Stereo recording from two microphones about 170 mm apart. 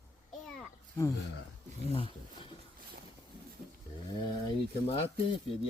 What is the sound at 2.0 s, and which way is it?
Speech, 30° left (ahead or behind).